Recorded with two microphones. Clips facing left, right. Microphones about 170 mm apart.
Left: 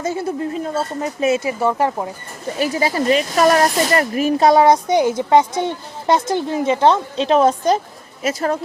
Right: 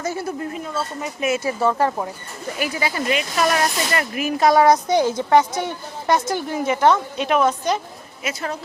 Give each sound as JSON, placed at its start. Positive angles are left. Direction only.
{"t": 0.0, "sound": "speech", "side_deg": 25}
{"t": 1.5, "sound": "speech", "side_deg": 15}
{"t": 2.6, "sound": "speech", "side_deg": 35}